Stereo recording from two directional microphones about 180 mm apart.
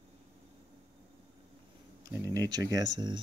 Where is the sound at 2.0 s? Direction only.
20° right (ahead or behind).